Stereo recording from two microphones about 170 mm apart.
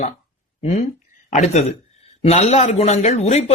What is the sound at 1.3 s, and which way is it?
Speech, 40° left (ahead or behind).